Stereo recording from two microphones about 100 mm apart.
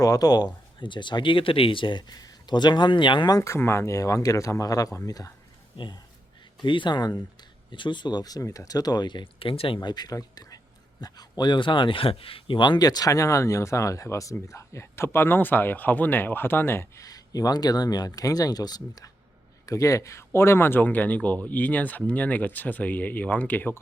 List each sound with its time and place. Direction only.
0.0 s speech: 40° left (ahead or behind)
0.8 s speech: 50° left (ahead or behind)
3.3 s speech: 30° left (ahead or behind)
5.7 s speech: 55° left (ahead or behind); by 23.8 s 20° left (ahead or behind)